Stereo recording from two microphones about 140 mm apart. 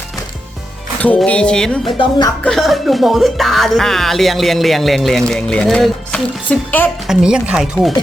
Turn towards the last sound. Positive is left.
turn(degrees=0)  # may be behind; listen again after turning